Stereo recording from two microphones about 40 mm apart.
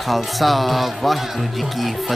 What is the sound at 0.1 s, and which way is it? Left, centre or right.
Speech, centre.